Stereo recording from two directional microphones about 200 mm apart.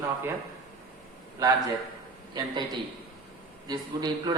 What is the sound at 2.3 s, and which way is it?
Speech, 20° right (ahead or behind).